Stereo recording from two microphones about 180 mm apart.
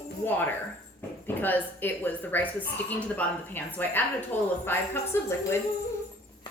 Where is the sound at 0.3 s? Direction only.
10° left (ahead or behind).